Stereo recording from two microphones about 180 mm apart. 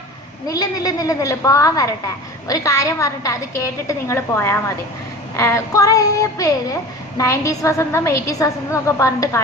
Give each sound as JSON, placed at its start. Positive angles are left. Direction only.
{"t": 0.4, "sound": "a woman's voice", "side_deg": 20}